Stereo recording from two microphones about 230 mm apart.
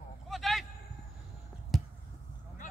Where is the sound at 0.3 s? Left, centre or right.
Centre.